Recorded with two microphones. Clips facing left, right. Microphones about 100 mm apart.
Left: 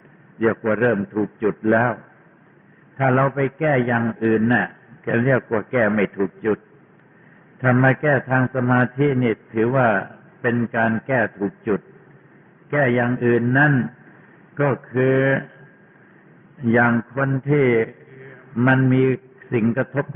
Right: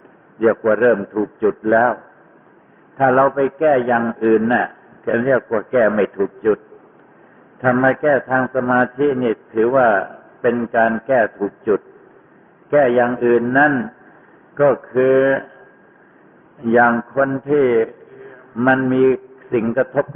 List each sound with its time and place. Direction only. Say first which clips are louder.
0.5 s a man's voice: right 6 dB; 30° right (ahead or behind)
3.0 s a man's voice: right 5 dB; 35° right (ahead or behind)
7.7 s a man's voice: right 2 dB; 20° right (ahead or behind)
7.9 s a man's voice: right 3 dB; 30° right (ahead or behind)
16.6 s a man's voice: right 4 dB; 35° right (ahead or behind)